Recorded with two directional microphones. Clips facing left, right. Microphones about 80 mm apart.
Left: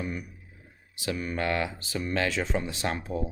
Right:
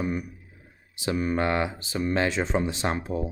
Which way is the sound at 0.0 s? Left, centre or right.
Right.